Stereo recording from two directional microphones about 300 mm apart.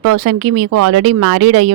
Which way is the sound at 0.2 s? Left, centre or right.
Right.